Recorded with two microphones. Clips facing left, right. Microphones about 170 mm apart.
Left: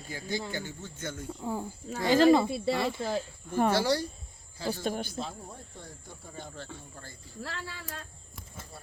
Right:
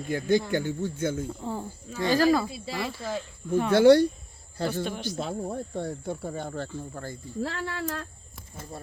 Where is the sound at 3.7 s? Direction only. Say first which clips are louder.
Right 11 dB; 60° right (ahead or behind).